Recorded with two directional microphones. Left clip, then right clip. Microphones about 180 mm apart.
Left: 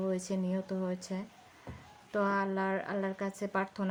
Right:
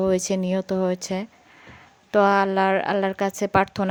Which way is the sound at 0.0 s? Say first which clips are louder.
Right 13 dB; 50° right (ahead or behind).